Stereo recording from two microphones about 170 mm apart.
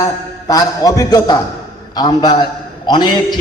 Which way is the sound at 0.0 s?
20° left (ahead or behind).